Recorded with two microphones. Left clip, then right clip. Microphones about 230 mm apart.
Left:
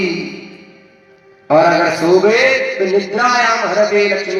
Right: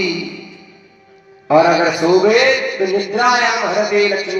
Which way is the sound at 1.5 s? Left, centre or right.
Left.